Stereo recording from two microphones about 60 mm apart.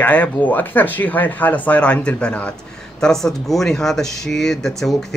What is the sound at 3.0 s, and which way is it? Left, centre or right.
Speech, centre.